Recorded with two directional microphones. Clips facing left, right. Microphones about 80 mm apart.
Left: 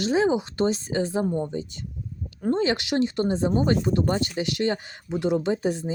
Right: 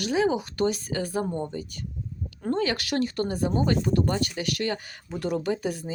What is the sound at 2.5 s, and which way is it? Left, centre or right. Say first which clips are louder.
Speech: left 3 dB; left.